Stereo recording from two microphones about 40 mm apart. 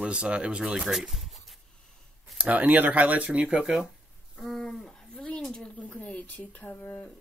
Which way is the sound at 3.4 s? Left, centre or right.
Right.